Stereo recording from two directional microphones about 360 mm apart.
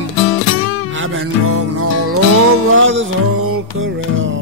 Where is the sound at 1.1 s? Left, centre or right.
Right.